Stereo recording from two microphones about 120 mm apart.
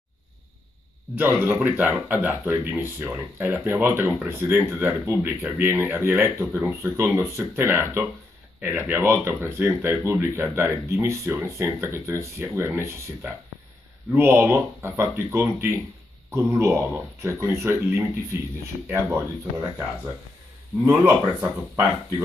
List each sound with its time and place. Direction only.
1.1 s speech: 15° right (ahead or behind)
20.8 s speech: 15° right (ahead or behind)